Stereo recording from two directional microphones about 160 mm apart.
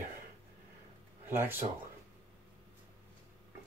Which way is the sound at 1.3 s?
15° right (ahead or behind).